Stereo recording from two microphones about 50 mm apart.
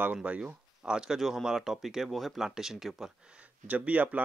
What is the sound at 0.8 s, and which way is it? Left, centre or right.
Speech, centre.